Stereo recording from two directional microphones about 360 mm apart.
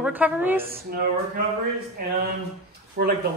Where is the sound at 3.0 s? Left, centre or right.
Right.